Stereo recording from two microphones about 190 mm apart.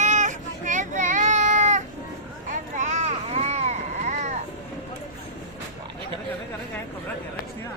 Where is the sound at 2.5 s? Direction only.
40° right (ahead or behind).